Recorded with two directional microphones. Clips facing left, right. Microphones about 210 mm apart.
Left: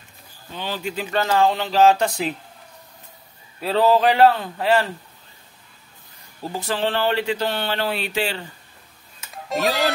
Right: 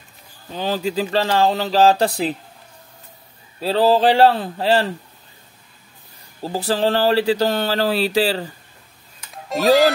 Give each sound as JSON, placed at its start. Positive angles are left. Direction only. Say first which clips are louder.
{"t": 0.5, "sound": "speech", "louder": "right 6 dB", "side_deg": -40}
{"t": 3.6, "sound": "speech", "louder": "right 2 dB", "side_deg": -30}
{"t": 6.4, "sound": "speech", "louder": "right 5 dB", "side_deg": -35}
{"t": 9.3, "sound": "music", "louder": "right 7 dB", "side_deg": 0}